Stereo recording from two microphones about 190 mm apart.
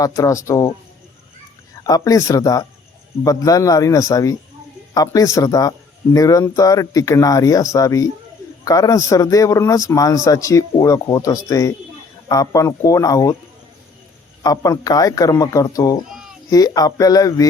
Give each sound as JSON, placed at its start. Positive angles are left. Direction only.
{"t": 0.0, "sound": "speech", "side_deg": 15}
{"t": 1.8, "sound": "speech", "side_deg": 20}
{"t": 14.4, "sound": "speech", "side_deg": 20}
{"t": 16.0, "sound": "cat", "side_deg": 0}
{"t": 16.5, "sound": "speech", "side_deg": 20}